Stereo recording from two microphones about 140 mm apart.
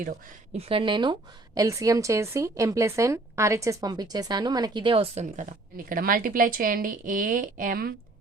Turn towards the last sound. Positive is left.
turn(degrees=-90)